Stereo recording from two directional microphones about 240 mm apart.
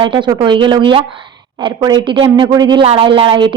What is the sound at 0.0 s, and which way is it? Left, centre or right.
A woman's voice, centre.